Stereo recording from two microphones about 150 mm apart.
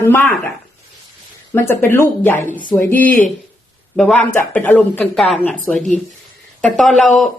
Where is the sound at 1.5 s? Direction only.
15° left (ahead or behind).